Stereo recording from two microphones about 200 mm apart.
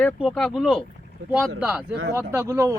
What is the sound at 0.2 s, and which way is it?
A man's voice, centre (ahead or behind).